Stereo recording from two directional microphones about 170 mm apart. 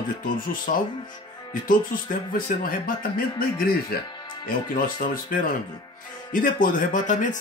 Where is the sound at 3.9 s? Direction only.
65° left (ahead or behind).